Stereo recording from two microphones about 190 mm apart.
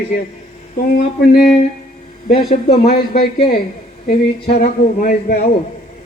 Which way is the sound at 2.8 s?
50° left (ahead or behind).